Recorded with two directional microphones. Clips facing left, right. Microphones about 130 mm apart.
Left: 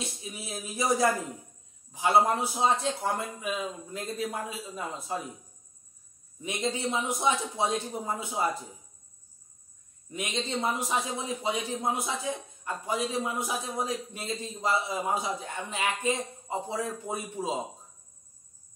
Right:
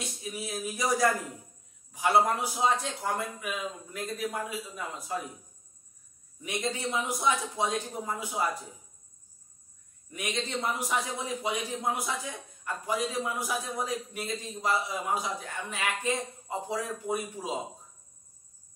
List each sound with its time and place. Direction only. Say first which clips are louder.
0.0 s a man's voice: right 2 dB; 25° left (ahead or behind)
6.6 s a man's voice: left 2 dB; 25° left (ahead or behind)
10.1 s a man's voice: left 1 dB; 25° left (ahead or behind)